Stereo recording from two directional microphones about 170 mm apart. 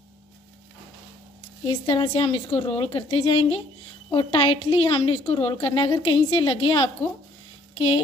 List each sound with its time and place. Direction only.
1.7 s a woman's voice: 30° left (ahead or behind)